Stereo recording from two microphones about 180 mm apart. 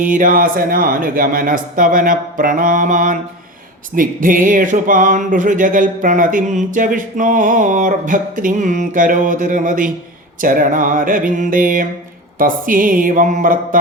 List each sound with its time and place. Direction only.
0.0 s speech: 50° right (ahead or behind)